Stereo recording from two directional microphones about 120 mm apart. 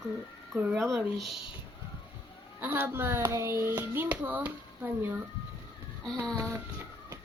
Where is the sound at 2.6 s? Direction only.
15° right (ahead or behind).